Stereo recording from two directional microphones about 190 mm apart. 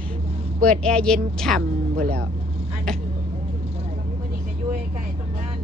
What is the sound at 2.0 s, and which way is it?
Speech, 50° right (ahead or behind).